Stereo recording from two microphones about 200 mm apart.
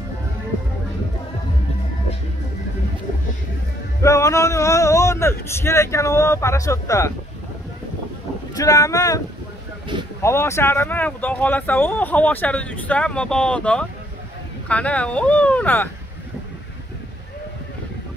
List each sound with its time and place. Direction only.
4.0 s speech: 15° left (ahead or behind)
8.5 s speech: 15° left (ahead or behind)
10.2 s speech: 15° left (ahead or behind)